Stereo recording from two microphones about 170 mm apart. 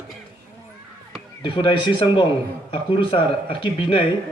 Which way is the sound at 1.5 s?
30° left (ahead or behind).